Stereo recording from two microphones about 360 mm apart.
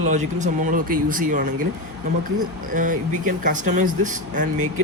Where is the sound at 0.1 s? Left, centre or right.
Centre.